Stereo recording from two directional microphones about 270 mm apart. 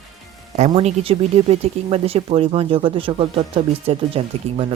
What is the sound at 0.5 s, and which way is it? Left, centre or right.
Speech, right.